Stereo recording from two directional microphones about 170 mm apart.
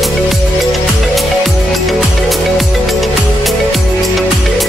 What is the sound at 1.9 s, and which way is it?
Music, centre (ahead or behind).